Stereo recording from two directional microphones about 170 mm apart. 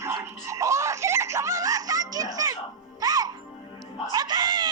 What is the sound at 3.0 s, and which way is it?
Music, 20° right (ahead or behind).